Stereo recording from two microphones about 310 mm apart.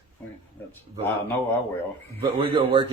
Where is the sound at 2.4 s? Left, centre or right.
Centre.